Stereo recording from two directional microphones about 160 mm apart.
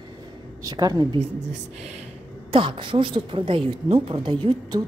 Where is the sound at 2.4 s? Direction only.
30° right (ahead or behind).